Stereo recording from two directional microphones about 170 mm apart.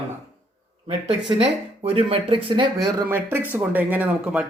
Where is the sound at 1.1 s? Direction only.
35° right (ahead or behind).